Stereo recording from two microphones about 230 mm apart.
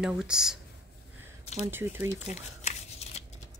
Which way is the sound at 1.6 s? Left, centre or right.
Centre.